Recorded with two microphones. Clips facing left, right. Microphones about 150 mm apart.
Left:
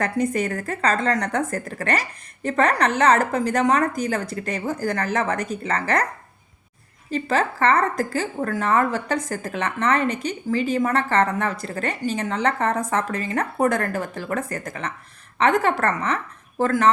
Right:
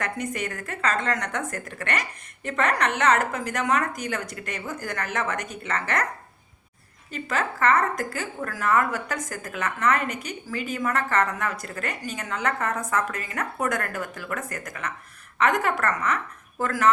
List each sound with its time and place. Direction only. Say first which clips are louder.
0.0 s a woman's voice: left 7 dB; 35° left (ahead or behind)
7.1 s a woman's voice: left 6 dB; 30° left (ahead or behind)